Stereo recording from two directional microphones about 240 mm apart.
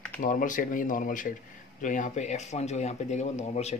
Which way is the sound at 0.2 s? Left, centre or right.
Left.